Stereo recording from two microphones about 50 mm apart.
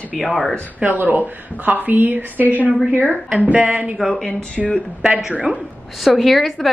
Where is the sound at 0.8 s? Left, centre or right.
Right.